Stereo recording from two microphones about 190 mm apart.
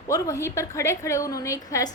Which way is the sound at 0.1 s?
15° left (ahead or behind).